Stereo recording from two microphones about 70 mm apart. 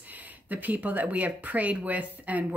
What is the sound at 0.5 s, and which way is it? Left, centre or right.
Speech, right.